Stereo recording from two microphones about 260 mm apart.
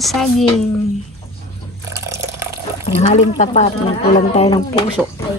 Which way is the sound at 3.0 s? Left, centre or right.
Left.